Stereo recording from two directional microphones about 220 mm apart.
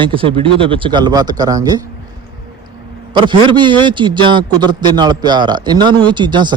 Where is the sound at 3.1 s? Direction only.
20° right (ahead or behind).